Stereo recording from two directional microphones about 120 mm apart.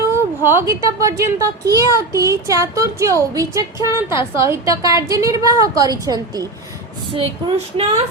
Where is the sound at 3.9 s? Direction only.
40° left (ahead or behind).